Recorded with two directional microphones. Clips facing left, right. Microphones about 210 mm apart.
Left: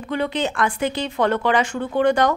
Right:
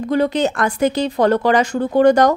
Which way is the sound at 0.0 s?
40° right (ahead or behind).